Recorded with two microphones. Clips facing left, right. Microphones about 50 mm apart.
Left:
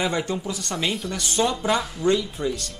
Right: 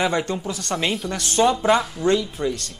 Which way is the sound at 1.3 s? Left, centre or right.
Centre.